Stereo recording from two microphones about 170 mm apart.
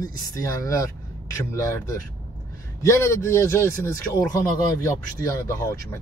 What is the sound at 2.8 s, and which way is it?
Speech, 15° left (ahead or behind).